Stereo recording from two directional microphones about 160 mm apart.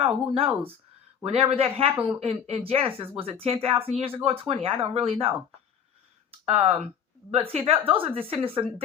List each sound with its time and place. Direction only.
0.0 s speech: 35° right (ahead or behind)
6.4 s speech: 40° right (ahead or behind)